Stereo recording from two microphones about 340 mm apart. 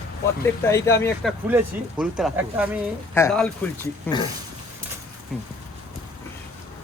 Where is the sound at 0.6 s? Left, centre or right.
Centre.